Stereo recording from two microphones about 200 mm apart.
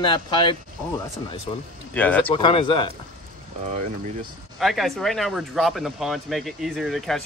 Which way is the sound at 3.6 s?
35° right (ahead or behind).